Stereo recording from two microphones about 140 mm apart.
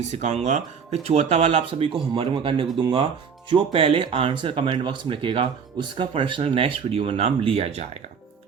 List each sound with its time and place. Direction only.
0.1 s speech: 55° right (ahead or behind)